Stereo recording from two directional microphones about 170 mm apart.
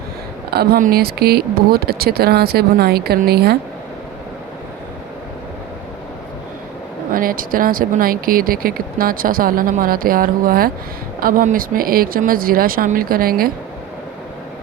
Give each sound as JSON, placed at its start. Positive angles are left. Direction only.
{"t": 0.5, "sound": "speech", "side_deg": -65}
{"t": 7.1, "sound": "speech", "side_deg": -55}